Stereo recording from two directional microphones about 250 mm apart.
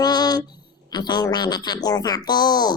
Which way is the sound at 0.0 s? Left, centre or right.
Centre.